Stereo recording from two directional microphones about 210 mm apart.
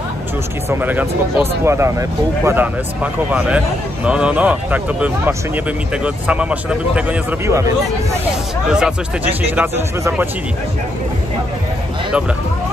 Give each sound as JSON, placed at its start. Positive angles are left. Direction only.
{"t": 0.7, "sound": "speech", "side_deg": -10}
{"t": 8.7, "sound": "speech", "side_deg": -5}